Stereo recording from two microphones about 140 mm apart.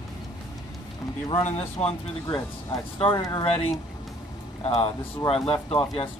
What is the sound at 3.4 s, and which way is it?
Speech, 45° left (ahead or behind).